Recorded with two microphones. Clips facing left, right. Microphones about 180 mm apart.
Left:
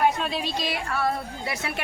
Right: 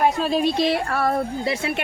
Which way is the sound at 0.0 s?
40° right (ahead or behind).